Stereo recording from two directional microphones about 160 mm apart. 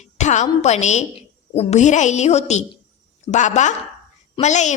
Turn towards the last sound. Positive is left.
turn(degrees=50)  # may be behind; listen again after turning